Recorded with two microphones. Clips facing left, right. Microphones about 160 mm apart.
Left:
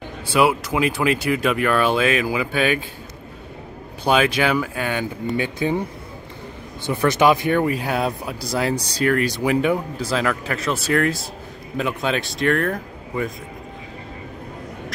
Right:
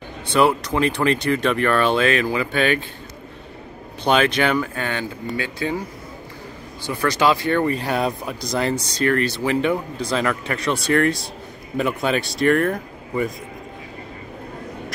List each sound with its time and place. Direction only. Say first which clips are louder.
0.3 s speech: even; 5° left (ahead or behind)
4.0 s speech: even; 5° left (ahead or behind)
6.9 s speech: left 2 dB; 20° left (ahead or behind); by 13.3 s 5° right (ahead or behind)